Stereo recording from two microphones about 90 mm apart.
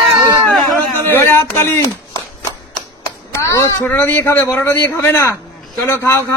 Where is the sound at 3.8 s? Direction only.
20° left (ahead or behind).